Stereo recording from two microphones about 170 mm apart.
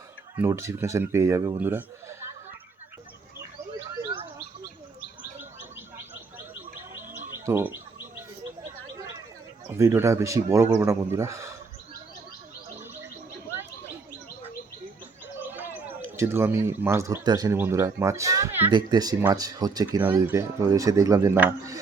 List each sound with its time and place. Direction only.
0.3 s speech: 15° right (ahead or behind)
4.0 s a sound: 30° right (ahead or behind)
7.4 s bird: 15° right (ahead or behind)
9.6 s speech: 15° right (ahead or behind)
15.4 s speech: 15° right (ahead or behind)